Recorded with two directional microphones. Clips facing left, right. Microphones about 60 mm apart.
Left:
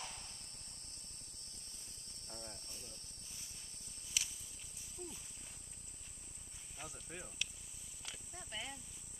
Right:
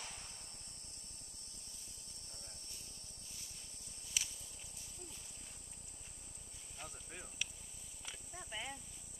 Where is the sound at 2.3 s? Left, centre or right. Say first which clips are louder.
Left 10 dB; left.